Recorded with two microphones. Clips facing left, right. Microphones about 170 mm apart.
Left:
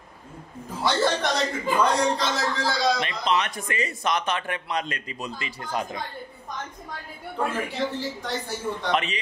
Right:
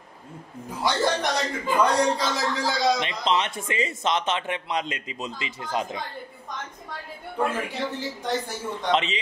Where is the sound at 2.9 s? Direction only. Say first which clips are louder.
Even; 25° right (ahead or behind).